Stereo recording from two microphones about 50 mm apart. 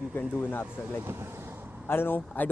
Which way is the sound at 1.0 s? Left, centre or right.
Right.